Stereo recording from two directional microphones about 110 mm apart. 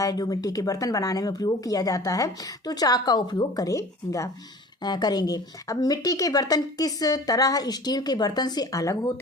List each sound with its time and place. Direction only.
0.0 s speech: 35° left (ahead or behind)
4.8 s speech: 40° left (ahead or behind)